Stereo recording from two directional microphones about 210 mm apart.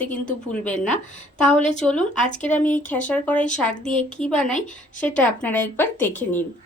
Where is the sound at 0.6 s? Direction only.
5° left (ahead or behind).